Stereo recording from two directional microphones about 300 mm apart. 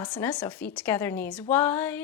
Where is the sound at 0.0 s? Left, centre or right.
Centre.